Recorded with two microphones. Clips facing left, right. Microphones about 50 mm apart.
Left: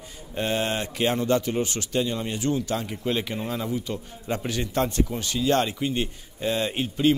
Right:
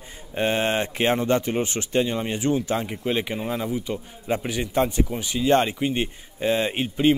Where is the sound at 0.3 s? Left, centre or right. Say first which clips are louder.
Right 3 dB; right.